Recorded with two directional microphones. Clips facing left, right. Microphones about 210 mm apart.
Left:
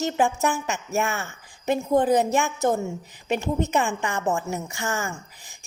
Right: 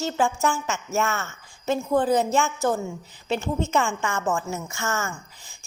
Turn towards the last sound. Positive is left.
turn(degrees=15)  # may be behind; listen again after turning